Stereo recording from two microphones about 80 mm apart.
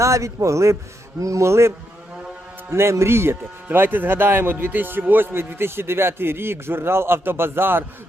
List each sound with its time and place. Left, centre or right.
0.0 s a man's voice: right